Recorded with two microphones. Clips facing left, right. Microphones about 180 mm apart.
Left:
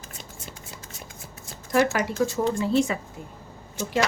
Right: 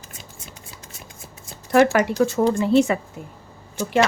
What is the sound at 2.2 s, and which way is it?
A woman's voice, 65° right (ahead or behind).